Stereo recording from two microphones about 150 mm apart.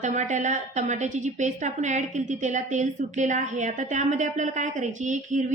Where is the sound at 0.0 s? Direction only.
50° right (ahead or behind).